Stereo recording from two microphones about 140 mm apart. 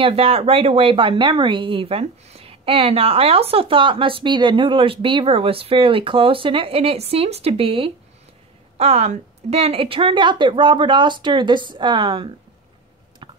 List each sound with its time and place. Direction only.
0.0 s speech: 45° right (ahead or behind)